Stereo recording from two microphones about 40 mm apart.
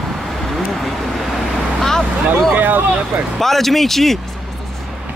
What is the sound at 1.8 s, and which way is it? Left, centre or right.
Vehicle, centre.